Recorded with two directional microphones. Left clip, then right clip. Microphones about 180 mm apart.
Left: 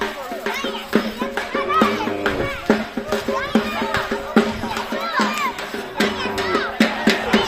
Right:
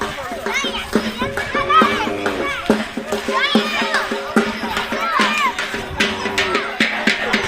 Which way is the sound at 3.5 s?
50° right (ahead or behind).